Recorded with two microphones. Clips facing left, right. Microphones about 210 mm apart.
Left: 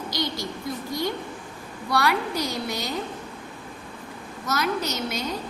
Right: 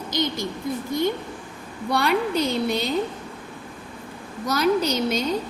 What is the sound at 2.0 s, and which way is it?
Speech, 25° right (ahead or behind).